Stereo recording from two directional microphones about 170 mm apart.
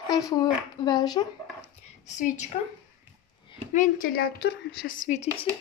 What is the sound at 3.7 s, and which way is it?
A woman's voice, 50° left (ahead or behind).